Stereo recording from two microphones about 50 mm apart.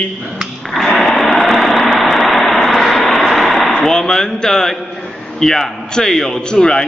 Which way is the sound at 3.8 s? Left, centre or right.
Centre.